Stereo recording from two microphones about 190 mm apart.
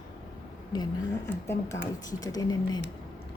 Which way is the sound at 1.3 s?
10° left (ahead or behind).